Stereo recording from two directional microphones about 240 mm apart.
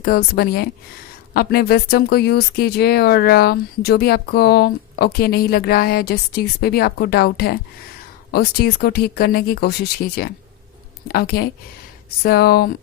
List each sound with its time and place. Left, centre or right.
0.0 s speech: left